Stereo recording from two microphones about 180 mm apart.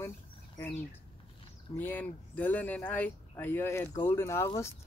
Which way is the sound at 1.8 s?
10° left (ahead or behind).